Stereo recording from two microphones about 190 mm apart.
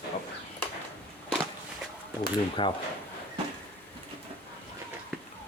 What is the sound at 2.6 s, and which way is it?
Speech, 25° left (ahead or behind).